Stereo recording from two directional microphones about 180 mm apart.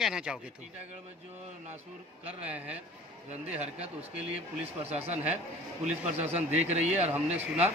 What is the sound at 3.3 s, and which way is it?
Speech, 40° right (ahead or behind).